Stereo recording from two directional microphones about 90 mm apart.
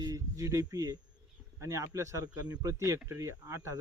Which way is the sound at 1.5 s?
30° right (ahead or behind).